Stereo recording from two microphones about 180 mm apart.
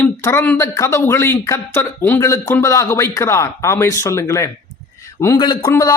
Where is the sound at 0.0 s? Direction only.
10° left (ahead or behind).